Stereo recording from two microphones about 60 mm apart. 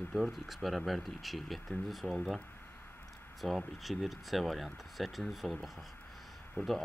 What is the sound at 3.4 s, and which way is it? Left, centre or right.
Speech, centre.